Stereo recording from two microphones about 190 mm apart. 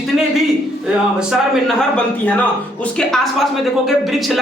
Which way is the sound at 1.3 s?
5° left (ahead or behind).